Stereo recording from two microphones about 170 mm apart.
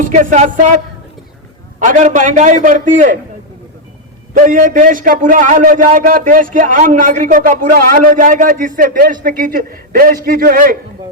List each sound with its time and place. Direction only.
0.0 s a man's voice: 50° right (ahead or behind)
1.8 s a man's voice: 50° right (ahead or behind)
4.4 s a man's voice: 55° right (ahead or behind)